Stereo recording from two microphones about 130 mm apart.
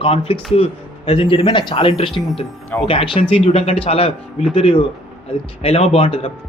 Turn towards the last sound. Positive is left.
turn(degrees=45)  # may be behind; listen again after turning